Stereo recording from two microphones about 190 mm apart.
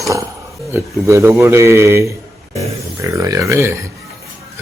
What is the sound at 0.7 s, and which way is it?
A man's voice, 15° right (ahead or behind).